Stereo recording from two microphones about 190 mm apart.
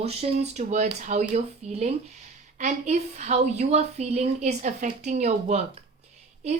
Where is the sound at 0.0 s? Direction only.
35° right (ahead or behind).